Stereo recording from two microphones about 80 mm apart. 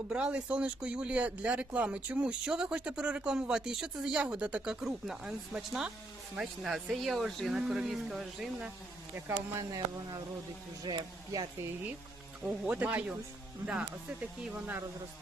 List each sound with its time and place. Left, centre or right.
0.1 s speech: centre
9.1 s speech: right
10.8 s speech: right
12.5 s speech: centre